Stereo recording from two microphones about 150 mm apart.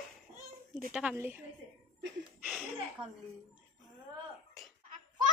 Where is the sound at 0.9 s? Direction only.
5° right (ahead or behind).